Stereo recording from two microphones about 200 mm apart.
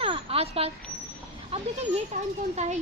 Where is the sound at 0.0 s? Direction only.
25° right (ahead or behind).